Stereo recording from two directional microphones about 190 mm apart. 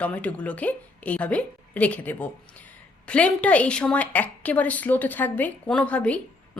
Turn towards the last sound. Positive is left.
turn(degrees=5)  # may be behind; listen again after turning